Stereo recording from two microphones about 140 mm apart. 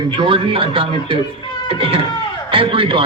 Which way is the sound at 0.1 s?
35° right (ahead or behind).